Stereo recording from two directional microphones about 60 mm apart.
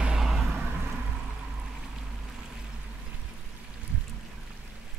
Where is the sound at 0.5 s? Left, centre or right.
Right.